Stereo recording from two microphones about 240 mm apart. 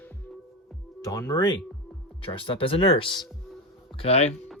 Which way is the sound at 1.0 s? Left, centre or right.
Centre.